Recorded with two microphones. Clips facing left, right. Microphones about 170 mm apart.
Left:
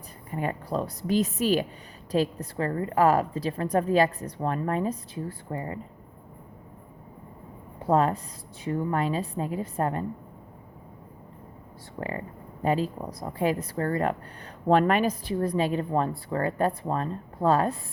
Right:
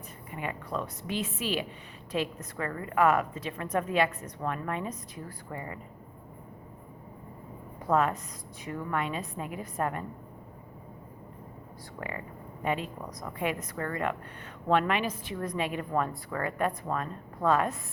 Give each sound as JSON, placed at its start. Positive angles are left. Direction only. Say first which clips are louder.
{"t": 0.3, "sound": "a woman's voice", "louder": "left 6 dB", "side_deg": 40}
{"t": 7.8, "sound": "a woman's voice", "louder": "left 4 dB", "side_deg": 30}
{"t": 11.9, "sound": "a woman's voice", "louder": "left 5 dB", "side_deg": 35}